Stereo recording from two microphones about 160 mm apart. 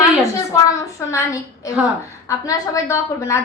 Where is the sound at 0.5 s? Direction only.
20° left (ahead or behind).